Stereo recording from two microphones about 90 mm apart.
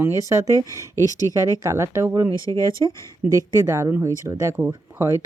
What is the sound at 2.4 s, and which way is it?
Speech, 40° left (ahead or behind).